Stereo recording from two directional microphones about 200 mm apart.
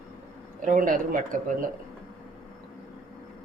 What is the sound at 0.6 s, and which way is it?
Speech, 40° right (ahead or behind).